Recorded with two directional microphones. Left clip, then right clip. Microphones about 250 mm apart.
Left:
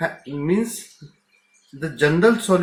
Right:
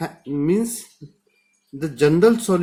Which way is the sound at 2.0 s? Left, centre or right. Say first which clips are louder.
Right 1 dB; right.